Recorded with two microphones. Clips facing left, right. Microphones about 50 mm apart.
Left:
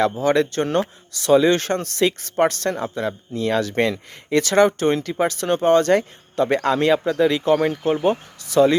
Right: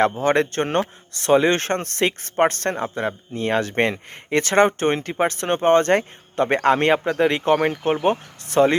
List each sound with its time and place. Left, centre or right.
0.2 s speech: right